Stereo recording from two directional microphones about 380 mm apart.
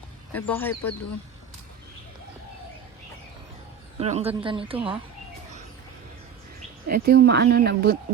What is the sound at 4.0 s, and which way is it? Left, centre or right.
Speech, centre.